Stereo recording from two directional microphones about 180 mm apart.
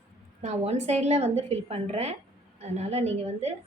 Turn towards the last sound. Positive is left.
turn(degrees=-35)  # may be behind; listen again after turning